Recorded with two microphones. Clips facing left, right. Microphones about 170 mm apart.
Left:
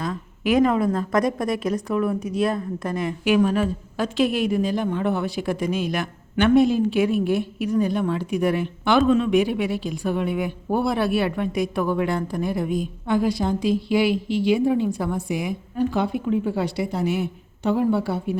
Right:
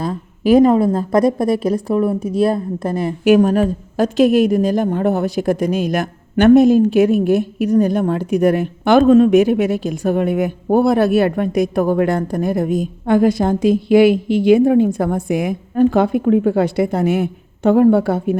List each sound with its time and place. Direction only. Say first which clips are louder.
0.0 s a woman's voice: right 7 dB; 35° right (ahead or behind); by 18.3 s 50° right (ahead or behind)